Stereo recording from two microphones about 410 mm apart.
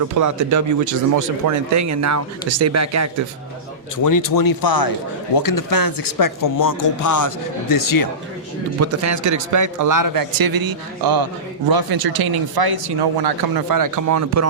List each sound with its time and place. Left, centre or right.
0.2 s speech: right
3.9 s speech: left
8.8 s speech: right